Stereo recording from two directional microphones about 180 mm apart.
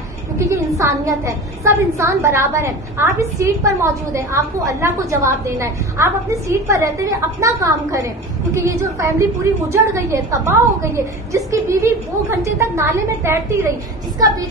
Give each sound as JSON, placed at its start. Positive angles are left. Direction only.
{"t": 0.4, "sound": "a woman's voice", "side_deg": -15}